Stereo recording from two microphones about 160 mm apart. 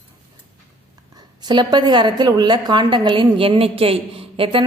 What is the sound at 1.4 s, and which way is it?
A woman's voice, 25° right (ahead or behind).